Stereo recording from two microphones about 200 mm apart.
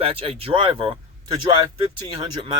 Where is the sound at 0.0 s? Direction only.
30° right (ahead or behind).